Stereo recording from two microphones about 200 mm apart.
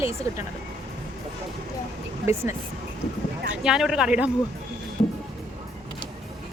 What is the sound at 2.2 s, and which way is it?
A woman's voice, 15° right (ahead or behind).